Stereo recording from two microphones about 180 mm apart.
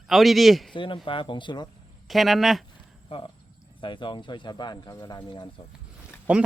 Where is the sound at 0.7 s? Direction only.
25° left (ahead or behind).